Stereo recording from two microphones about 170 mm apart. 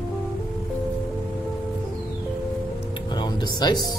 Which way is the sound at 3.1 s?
25° left (ahead or behind).